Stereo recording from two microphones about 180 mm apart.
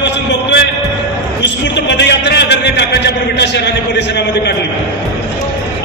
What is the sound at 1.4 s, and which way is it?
A man's voice, 75° left (ahead or behind).